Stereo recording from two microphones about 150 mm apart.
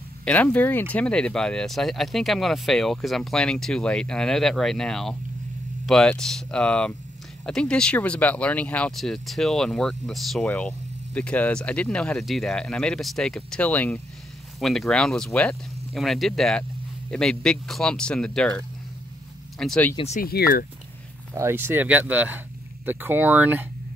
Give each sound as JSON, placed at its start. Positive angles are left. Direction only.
{"t": 0.2, "sound": "speech", "side_deg": 10}
{"t": 19.6, "sound": "speech", "side_deg": 5}
{"t": 20.2, "sound": "speech", "side_deg": 85}
{"t": 21.4, "sound": "speech", "side_deg": -15}